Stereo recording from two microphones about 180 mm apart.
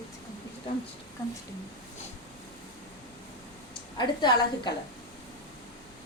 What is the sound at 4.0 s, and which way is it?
Speech, 25° left (ahead or behind).